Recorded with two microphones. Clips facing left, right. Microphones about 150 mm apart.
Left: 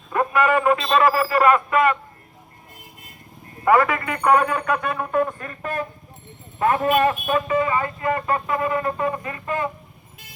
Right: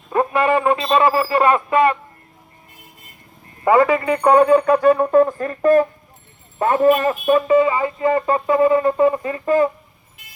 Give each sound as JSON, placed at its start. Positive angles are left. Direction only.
{"t": 0.1, "sound": "speech", "side_deg": -30}
{"t": 3.6, "sound": "speech", "side_deg": -25}